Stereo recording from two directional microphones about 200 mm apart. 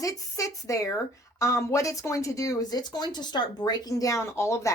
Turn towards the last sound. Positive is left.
turn(degrees=15)  # may be behind; listen again after turning